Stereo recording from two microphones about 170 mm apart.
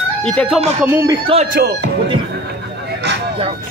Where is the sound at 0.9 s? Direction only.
15° right (ahead or behind).